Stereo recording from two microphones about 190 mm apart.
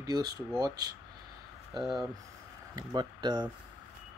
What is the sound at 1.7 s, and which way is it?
Speech, centre (ahead or behind).